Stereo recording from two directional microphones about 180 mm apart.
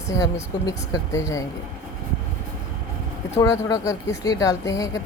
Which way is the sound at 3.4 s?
20° left (ahead or behind).